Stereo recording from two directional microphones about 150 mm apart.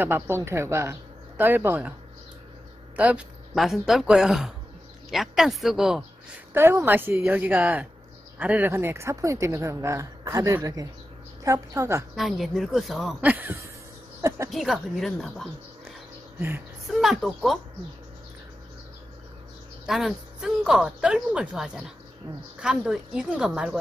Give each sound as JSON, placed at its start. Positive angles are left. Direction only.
{"t": 0.0, "sound": "a woman's voice", "side_deg": -15}
{"t": 3.0, "sound": "speech", "side_deg": -10}
{"t": 6.5, "sound": "a woman's voice", "side_deg": -15}
{"t": 12.2, "sound": "speech", "side_deg": 0}
{"t": 14.5, "sound": "speech", "side_deg": 0}
{"t": 16.3, "sound": "speech", "side_deg": -15}
{"t": 17.0, "sound": "speech", "side_deg": 0}
{"t": 19.9, "sound": "speech", "side_deg": 0}